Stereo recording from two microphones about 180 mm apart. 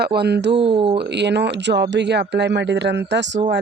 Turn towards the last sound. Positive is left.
turn(degrees=-75)  # may be behind; listen again after turning